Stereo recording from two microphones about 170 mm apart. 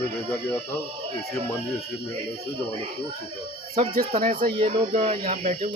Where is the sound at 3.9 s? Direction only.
60° right (ahead or behind).